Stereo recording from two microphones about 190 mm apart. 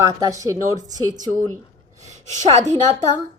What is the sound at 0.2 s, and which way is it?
Speech, 15° right (ahead or behind).